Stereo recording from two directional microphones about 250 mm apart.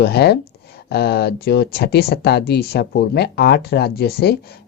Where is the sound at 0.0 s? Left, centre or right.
Left.